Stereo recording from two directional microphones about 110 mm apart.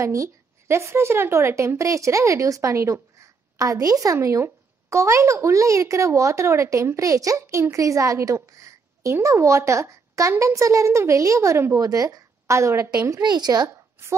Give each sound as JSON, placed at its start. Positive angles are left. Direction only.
{"t": 0.0, "sound": "a woman's voice", "side_deg": -25}